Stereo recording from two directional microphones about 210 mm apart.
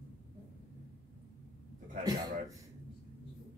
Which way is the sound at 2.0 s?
15° right (ahead or behind).